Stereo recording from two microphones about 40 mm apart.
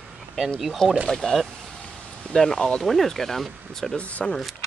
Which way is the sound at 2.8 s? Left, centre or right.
Centre.